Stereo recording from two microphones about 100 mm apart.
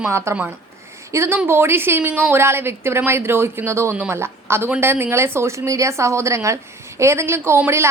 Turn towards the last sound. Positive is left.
turn(degrees=-25)  # may be behind; listen again after turning